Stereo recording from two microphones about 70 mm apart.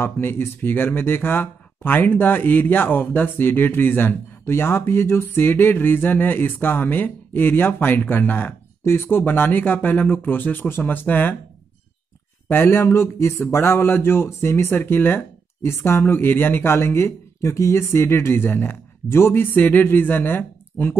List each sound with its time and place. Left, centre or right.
0.0 s speech: left
12.4 s speech: left